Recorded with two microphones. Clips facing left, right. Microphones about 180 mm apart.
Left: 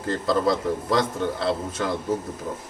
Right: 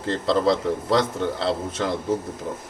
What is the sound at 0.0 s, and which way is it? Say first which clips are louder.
Speech: right 1 dB; 25° right (ahead or behind).